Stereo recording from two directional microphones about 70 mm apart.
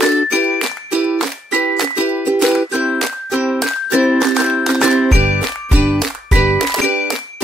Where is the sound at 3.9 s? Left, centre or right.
Centre.